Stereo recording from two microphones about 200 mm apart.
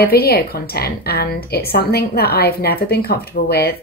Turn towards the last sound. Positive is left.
turn(degrees=50)  # may be behind; listen again after turning